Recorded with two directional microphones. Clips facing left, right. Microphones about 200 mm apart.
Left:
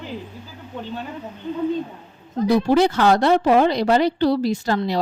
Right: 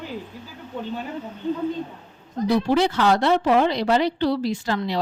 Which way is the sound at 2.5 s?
45° left (ahead or behind).